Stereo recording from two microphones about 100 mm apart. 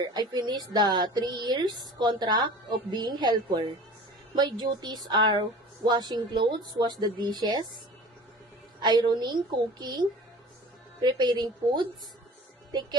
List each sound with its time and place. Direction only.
0.0 s a woman's voice: 45° right (ahead or behind)
8.8 s a woman's voice: 45° right (ahead or behind)